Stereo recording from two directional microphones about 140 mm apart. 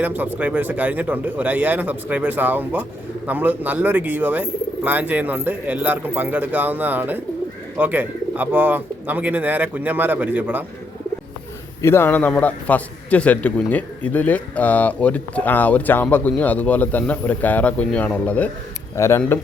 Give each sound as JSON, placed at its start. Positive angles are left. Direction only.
{"t": 0.0, "sound": "speech", "side_deg": -10}
{"t": 11.8, "sound": "a man's voice", "side_deg": 15}